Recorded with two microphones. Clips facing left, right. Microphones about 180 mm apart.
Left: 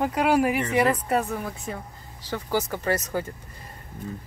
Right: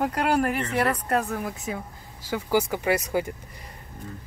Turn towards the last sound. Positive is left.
turn(degrees=-15)  # may be behind; listen again after turning